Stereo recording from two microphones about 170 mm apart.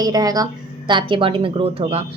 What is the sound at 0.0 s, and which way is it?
Speech, 20° right (ahead or behind).